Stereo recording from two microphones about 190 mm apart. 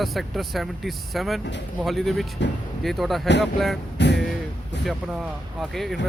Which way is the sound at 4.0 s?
65° left (ahead or behind).